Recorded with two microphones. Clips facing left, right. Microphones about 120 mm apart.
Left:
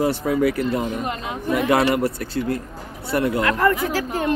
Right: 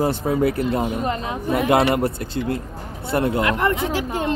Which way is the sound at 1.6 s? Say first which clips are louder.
Right 1 dB; 25° right (ahead or behind).